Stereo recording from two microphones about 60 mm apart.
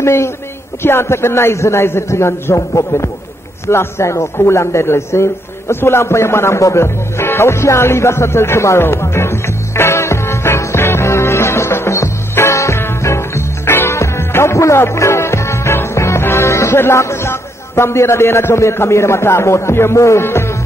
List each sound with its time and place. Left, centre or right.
0.0 s a man's voice: left
8.8 s music: left